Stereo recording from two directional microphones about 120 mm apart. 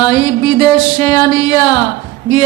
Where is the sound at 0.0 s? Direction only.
35° left (ahead or behind).